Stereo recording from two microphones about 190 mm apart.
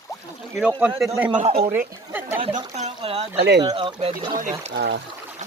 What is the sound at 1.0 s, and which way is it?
Speech, 15° right (ahead or behind).